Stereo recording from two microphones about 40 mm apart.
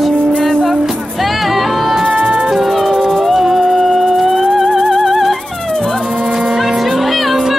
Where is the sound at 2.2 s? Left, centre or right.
Centre.